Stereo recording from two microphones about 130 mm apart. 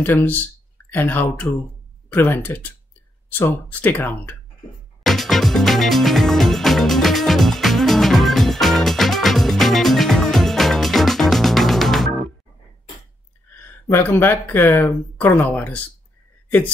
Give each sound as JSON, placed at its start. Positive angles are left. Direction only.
{"t": 0.0, "sound": "speech", "side_deg": 15}
{"t": 5.0, "sound": "music", "side_deg": 0}
{"t": 13.6, "sound": "speech", "side_deg": 15}